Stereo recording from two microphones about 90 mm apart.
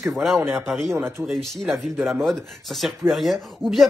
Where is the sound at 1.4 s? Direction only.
5° left (ahead or behind).